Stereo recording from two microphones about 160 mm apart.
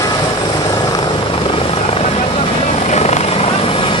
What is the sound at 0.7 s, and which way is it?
Helicopter, 25° left (ahead or behind).